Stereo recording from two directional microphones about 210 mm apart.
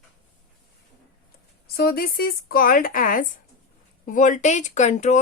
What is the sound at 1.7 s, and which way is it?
Speech, 45° left (ahead or behind).